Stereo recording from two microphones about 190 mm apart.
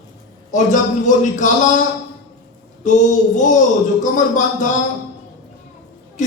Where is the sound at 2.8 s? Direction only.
40° left (ahead or behind).